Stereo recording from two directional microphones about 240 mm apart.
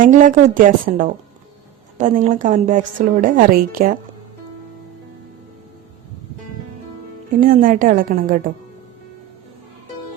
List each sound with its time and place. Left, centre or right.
0.0 s a woman's voice: right
7.3 s a woman's voice: right